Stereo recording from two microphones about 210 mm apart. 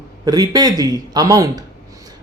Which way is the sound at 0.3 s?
20° right (ahead or behind).